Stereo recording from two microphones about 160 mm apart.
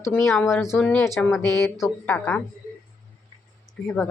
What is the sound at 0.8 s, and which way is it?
Speech, 10° left (ahead or behind).